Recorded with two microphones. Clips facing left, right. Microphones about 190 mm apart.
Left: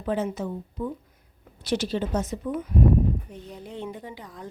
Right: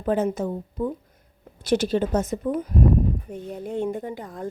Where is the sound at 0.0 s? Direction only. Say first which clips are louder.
Right 4 dB; 45° right (ahead or behind).